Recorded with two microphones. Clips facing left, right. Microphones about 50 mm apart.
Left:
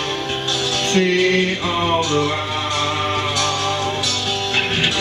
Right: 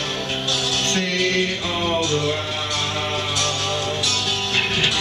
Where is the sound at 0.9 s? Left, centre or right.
Left.